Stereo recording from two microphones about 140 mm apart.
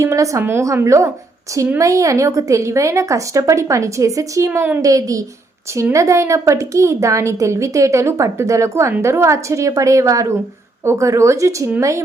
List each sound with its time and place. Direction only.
0.0 s a woman's voice: 20° right (ahead or behind)